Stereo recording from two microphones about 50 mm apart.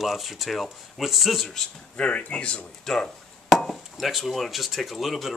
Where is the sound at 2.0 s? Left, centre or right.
Left.